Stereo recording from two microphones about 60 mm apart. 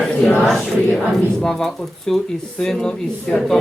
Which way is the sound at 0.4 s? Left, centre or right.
Centre.